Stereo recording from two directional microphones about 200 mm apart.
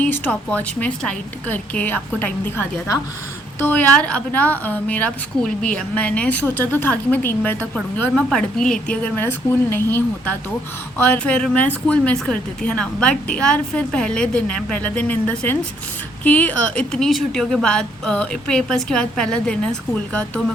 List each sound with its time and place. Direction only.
0.0 s a woman's voice: 10° left (ahead or behind)